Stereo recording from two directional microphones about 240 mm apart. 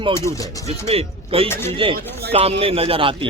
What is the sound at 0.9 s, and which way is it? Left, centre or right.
Speech, right.